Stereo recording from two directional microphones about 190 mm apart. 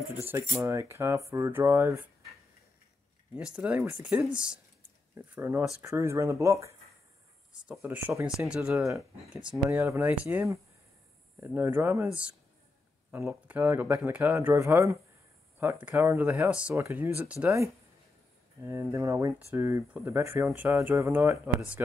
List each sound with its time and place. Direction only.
0.1 s speech: 10° right (ahead or behind)
3.3 s speech: 5° right (ahead or behind)
18.7 s speech: 15° right (ahead or behind)